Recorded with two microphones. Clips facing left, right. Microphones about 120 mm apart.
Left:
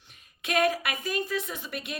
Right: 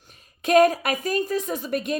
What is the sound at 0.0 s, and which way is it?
A woman's voice, 40° right (ahead or behind).